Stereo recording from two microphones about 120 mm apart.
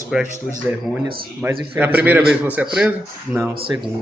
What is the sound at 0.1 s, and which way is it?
A man's voice, 5° right (ahead or behind).